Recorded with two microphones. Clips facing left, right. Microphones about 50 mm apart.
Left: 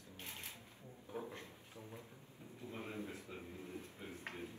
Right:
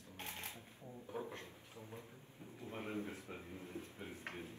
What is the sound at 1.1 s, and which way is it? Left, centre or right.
Drawer open or close, right.